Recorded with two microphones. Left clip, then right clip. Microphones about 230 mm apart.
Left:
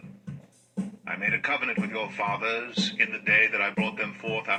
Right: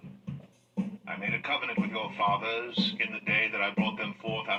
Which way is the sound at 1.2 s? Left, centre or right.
Left.